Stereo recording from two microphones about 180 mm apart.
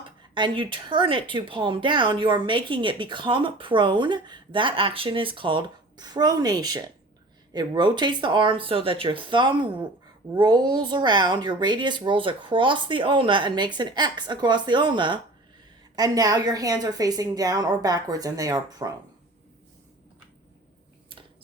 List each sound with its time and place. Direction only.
0.3 s speech: 25° right (ahead or behind)